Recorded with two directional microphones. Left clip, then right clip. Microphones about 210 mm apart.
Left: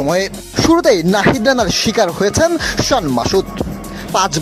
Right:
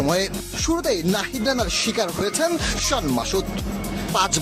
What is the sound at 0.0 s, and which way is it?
Speech, 20° left (ahead or behind).